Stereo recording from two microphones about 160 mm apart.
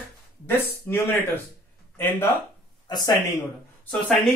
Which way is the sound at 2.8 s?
25° left (ahead or behind).